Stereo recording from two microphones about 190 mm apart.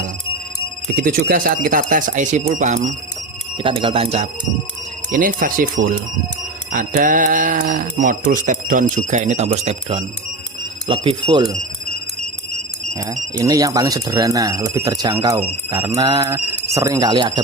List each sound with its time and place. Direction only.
0.9 s speech: 50° right (ahead or behind)
3.6 s speech: 30° right (ahead or behind)
5.1 s speech: 45° right (ahead or behind); by 11.4 s 25° right (ahead or behind)
12.9 s speech: 15° right (ahead or behind)